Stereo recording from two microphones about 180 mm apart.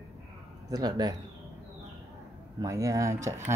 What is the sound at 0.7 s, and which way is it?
Speech, 20° right (ahead or behind).